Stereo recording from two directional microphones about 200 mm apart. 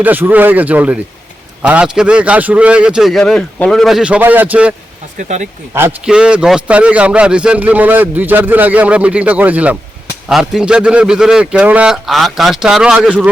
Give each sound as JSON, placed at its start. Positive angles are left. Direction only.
{"t": 0.0, "sound": "a man's voice", "side_deg": -10}
{"t": 5.1, "sound": "speech", "side_deg": -40}
{"t": 5.7, "sound": "a man's voice", "side_deg": -10}